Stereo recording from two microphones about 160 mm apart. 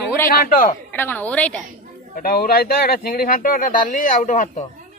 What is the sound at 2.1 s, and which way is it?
Speech, 65° left (ahead or behind).